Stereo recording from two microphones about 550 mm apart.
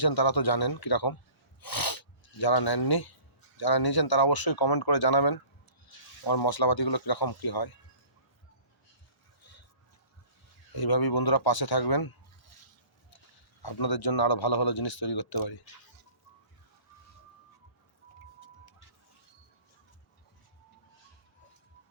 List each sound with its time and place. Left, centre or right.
0.0 s a man's voice: left
9.4 s a sound: left
10.8 s a man's voice: left
13.6 s a man's voice: left